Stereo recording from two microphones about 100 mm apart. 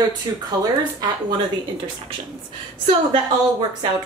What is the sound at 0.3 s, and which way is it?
Speech, 35° right (ahead or behind).